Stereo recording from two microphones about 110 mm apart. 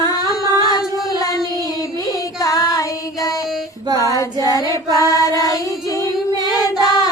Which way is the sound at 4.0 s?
30° left (ahead or behind).